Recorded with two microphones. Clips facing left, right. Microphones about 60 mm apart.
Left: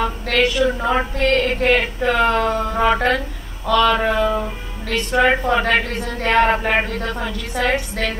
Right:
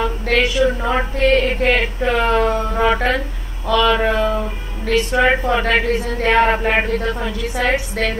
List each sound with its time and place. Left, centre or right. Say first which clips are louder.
0.4 s a woman's voice: left 1 dB; centre
2.6 s a sound: even; centre
4.8 s a woman's voice: right 1 dB; centre